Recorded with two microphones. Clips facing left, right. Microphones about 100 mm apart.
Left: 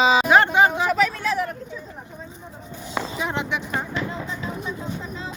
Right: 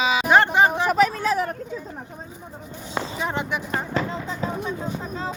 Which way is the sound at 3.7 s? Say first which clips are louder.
Right 2 dB; 40° right (ahead or behind).